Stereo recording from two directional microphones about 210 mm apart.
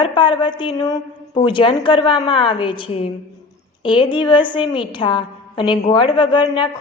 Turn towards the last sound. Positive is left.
turn(degrees=20)  # may be behind; listen again after turning